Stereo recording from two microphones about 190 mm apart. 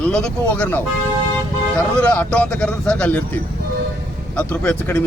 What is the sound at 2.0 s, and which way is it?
Speech, 5° left (ahead or behind).